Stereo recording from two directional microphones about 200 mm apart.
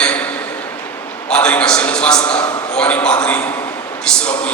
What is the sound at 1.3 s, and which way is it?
A man's voice, 5° left (ahead or behind).